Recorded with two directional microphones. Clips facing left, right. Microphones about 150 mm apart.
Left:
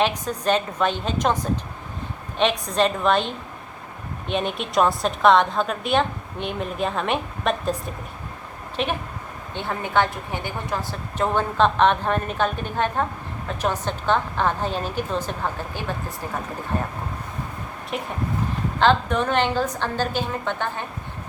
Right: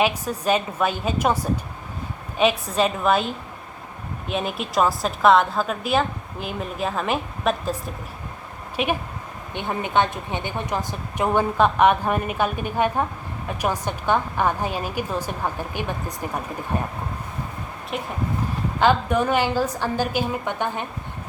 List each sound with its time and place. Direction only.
0.0 s a woman's voice: 10° right (ahead or behind)
2.4 s a woman's voice: 5° right (ahead or behind)
17.9 s a woman's voice: centre (ahead or behind)